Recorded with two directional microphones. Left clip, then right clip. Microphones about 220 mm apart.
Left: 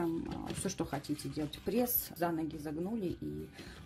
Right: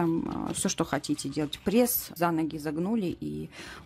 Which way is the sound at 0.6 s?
45° right (ahead or behind).